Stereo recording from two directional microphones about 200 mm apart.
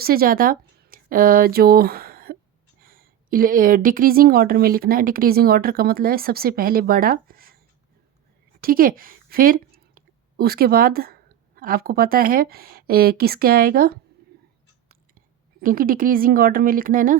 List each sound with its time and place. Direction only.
0.0 s speech: 45° right (ahead or behind)
8.6 s a woman's voice: 45° right (ahead or behind)
15.6 s speech: 45° right (ahead or behind)